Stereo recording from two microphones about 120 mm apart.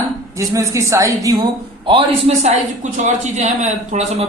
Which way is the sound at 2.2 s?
65° right (ahead or behind).